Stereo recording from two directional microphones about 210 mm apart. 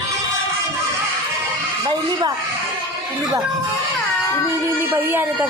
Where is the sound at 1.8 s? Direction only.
20° right (ahead or behind).